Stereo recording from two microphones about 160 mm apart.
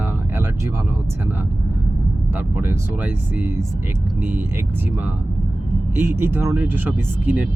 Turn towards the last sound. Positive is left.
turn(degrees=-10)  # may be behind; listen again after turning